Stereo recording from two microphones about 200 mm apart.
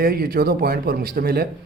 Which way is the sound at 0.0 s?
50° right (ahead or behind).